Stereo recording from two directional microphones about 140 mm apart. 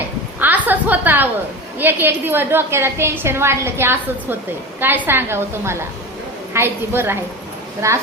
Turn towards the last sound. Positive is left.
turn(degrees=-20)  # may be behind; listen again after turning